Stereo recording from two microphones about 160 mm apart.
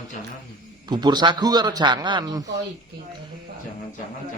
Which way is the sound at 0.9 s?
25° right (ahead or behind).